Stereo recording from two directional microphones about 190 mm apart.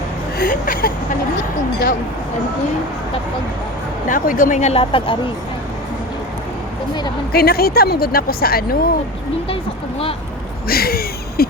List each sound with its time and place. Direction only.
0.3 s speech: 45° left (ahead or behind)
4.1 s speech: 45° left (ahead or behind); by 5.1 s 30° left (ahead or behind)
7.3 s speech: 55° left (ahead or behind)
10.7 s speech: 50° left (ahead or behind)